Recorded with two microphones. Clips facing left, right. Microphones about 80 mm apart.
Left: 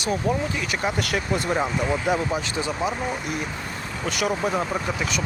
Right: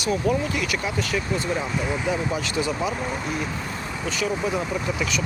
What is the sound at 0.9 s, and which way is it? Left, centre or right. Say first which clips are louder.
Speech: left 1 dB; left.